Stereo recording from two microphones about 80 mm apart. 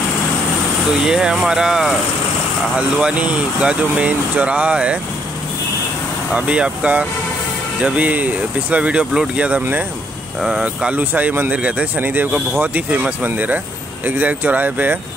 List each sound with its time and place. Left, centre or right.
1.0 s speech: centre
6.3 s speech: centre
9.6 s speech: right